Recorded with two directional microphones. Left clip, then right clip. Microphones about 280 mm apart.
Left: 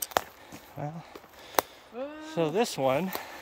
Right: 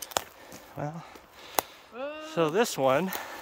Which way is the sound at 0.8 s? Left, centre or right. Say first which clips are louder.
Right 2 dB; centre.